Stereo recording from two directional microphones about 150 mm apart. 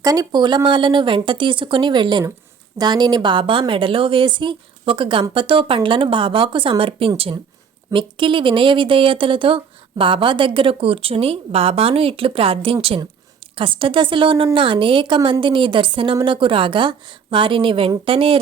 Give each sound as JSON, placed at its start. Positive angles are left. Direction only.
{"t": 0.0, "sound": "a woman's voice", "side_deg": -25}